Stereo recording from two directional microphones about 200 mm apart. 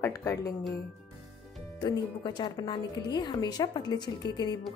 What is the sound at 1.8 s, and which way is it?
Speech, 20° left (ahead or behind).